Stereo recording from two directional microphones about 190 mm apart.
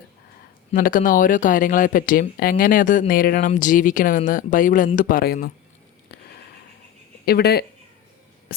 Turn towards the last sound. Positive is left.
turn(degrees=55)  # may be behind; listen again after turning